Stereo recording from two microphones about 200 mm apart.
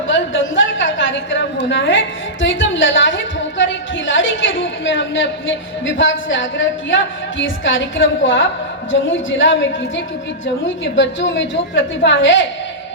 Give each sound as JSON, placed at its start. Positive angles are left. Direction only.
{"t": 0.1, "sound": "a woman's voice", "side_deg": 70}